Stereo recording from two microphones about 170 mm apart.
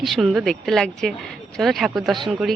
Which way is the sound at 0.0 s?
Centre (ahead or behind).